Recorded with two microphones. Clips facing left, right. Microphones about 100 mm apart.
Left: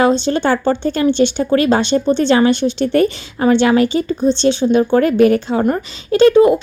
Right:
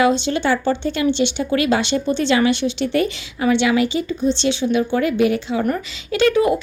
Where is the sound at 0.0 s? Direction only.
40° left (ahead or behind).